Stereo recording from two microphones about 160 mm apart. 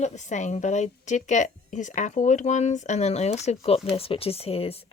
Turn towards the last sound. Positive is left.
turn(degrees=40)  # may be behind; listen again after turning